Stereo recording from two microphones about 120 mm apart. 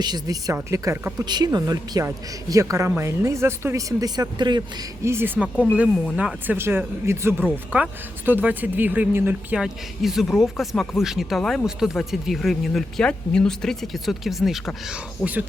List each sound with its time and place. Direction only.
0.0 s a woman's voice: 35° right (ahead or behind)
0.5 s speech: 20° right (ahead or behind)
1.2 s speech: 35° right (ahead or behind)
5.0 s speech: 20° right (ahead or behind)
9.6 s speech: 5° right (ahead or behind)